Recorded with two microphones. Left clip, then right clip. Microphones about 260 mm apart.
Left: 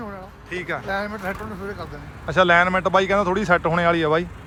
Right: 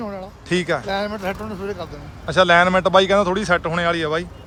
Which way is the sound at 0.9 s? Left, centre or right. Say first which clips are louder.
Right 3 dB; right.